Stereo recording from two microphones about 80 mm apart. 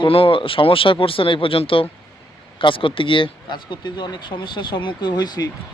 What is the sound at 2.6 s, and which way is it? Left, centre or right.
Speech, left.